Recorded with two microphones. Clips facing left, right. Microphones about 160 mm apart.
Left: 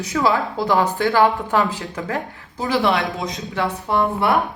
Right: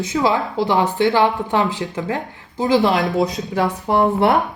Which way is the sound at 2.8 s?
35° right (ahead or behind).